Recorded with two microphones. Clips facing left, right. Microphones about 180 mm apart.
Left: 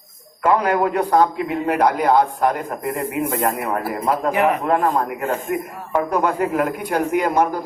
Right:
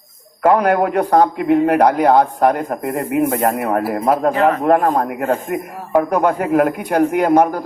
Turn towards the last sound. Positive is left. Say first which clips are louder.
# right 5 dB
turn(degrees=-50)  # may be behind; listen again after turning